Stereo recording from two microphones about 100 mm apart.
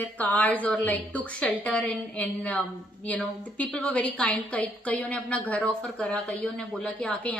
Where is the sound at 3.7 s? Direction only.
15° left (ahead or behind).